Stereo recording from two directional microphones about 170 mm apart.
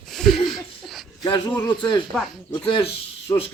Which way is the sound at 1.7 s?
30° left (ahead or behind).